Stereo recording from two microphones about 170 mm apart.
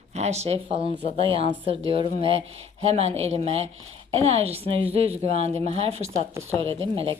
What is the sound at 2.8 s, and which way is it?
A woman's voice, 40° right (ahead or behind).